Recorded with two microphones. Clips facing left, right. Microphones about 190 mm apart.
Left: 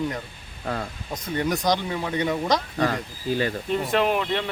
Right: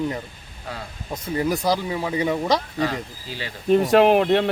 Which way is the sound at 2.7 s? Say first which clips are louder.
Even; 45° left (ahead or behind).